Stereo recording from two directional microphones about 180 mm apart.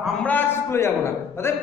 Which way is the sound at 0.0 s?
10° left (ahead or behind).